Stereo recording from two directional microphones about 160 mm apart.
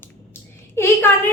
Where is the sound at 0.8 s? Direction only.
15° left (ahead or behind).